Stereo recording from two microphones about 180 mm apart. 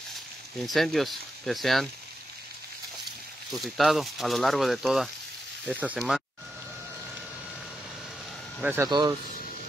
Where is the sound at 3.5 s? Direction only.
Centre (ahead or behind).